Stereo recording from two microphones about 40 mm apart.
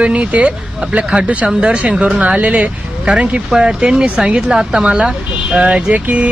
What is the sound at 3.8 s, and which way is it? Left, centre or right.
Speech, right.